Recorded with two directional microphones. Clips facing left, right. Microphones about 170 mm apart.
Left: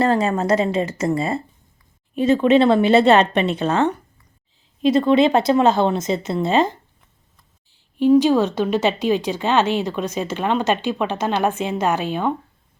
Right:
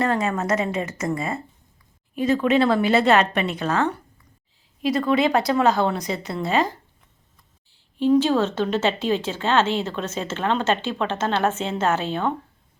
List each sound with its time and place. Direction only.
0.0 s a woman's voice: 30° left (ahead or behind)
7.7 s speech: 15° left (ahead or behind)